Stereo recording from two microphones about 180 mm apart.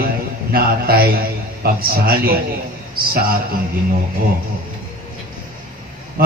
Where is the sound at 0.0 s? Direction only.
55° right (ahead or behind).